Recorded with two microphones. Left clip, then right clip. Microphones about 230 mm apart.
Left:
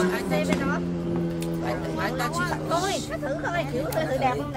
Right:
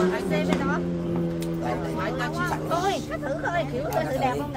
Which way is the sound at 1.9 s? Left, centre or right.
Left.